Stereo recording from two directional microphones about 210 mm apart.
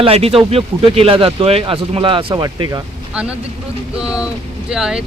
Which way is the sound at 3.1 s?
5° right (ahead or behind).